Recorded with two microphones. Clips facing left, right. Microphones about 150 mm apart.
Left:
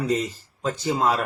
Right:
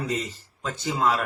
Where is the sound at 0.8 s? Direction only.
35° left (ahead or behind).